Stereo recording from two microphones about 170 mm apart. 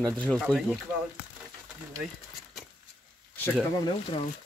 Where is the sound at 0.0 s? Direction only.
5° left (ahead or behind).